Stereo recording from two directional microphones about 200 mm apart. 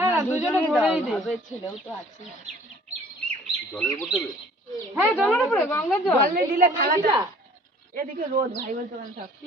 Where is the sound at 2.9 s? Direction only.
35° right (ahead or behind).